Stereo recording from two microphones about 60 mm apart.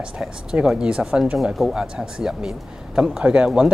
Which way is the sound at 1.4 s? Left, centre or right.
Centre.